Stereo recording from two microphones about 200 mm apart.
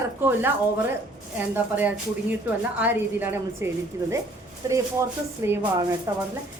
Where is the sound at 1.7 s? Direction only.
10° right (ahead or behind).